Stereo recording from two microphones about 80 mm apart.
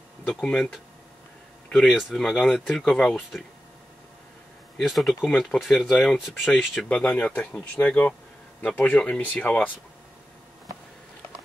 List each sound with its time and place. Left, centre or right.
0.3 s speech: centre
4.7 s speech: centre
6.9 s speech: centre
9.2 s speech: left